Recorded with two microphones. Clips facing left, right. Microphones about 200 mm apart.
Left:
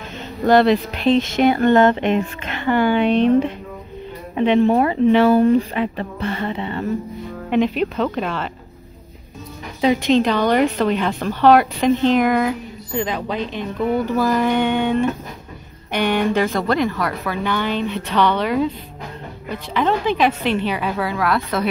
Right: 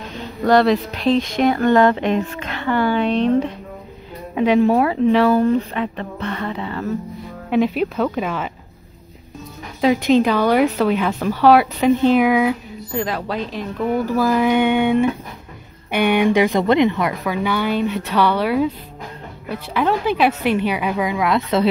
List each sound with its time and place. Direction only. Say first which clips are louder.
0.5 s speech: left 1 dB; centre (ahead or behind)
2.8 s a woman's voice: left 2 dB; 20° left (ahead or behind)
3.1 s speech: left 2 dB; 10° left (ahead or behind)
4.4 s speech: even; 5° right (ahead or behind)
7.4 s a woman's voice: even; 5° right (ahead or behind)
9.8 s a woman's voice: right 1 dB; 5° right (ahead or behind); by 17.1 s 20° right (ahead or behind)
17.3 s a woman's voice: right 2 dB; 10° right (ahead or behind)